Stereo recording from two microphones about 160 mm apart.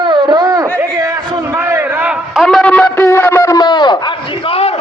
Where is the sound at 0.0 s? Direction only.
30° right (ahead or behind).